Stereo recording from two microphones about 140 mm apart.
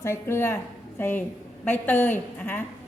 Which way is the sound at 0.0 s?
20° left (ahead or behind).